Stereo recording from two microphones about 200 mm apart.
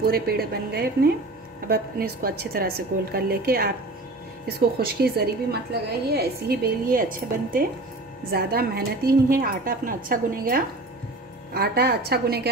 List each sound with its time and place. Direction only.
0.0 s a woman's voice: 50° right (ahead or behind)